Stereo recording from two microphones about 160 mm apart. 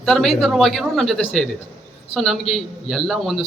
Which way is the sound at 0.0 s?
Centre (ahead or behind).